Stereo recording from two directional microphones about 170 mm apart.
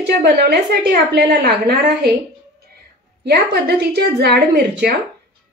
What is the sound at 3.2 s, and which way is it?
A woman's voice, 75° right (ahead or behind).